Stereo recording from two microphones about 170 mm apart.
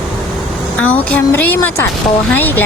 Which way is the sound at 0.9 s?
10° left (ahead or behind).